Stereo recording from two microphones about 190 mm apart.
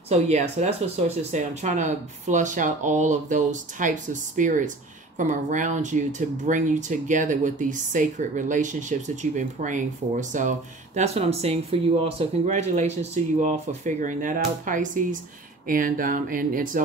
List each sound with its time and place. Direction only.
0.1 s speech: 35° right (ahead or behind)